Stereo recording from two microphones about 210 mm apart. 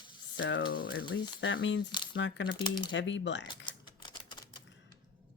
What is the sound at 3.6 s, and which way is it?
Typewriter, 20° left (ahead or behind).